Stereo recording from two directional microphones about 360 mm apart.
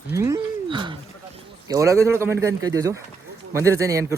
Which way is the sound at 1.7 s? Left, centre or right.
Centre.